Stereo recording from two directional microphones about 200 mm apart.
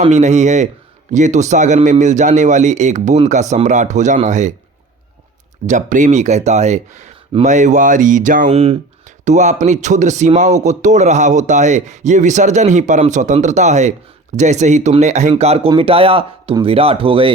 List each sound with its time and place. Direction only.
0.0 s speech: 35° right (ahead or behind)
5.6 s speech: 40° right (ahead or behind)